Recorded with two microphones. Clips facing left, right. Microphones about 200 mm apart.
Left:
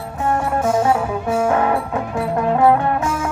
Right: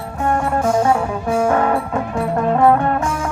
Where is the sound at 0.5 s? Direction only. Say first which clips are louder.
Right 1 dB; 5° left (ahead or behind).